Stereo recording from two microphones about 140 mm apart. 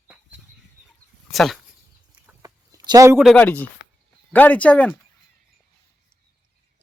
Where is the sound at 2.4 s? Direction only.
25° right (ahead or behind).